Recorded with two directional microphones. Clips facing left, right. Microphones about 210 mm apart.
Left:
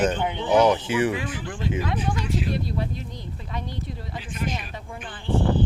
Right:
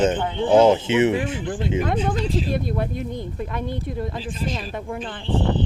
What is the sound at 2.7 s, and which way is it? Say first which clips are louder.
Speech: right 5 dB; 55° right (ahead or behind).